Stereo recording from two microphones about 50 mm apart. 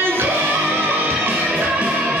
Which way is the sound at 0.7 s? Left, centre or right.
Right.